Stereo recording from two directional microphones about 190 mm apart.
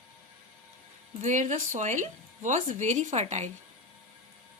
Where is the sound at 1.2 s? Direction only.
40° right (ahead or behind).